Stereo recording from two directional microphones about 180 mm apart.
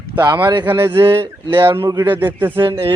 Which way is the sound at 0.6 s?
10° right (ahead or behind).